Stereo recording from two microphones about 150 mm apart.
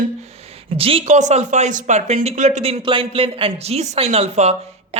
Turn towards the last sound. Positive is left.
turn(degrees=-50)  # may be behind; listen again after turning